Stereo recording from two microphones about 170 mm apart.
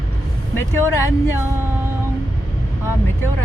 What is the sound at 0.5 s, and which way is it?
Speech, 15° left (ahead or behind).